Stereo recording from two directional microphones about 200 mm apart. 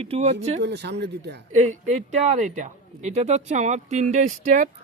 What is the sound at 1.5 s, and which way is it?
Speech, 35° right (ahead or behind).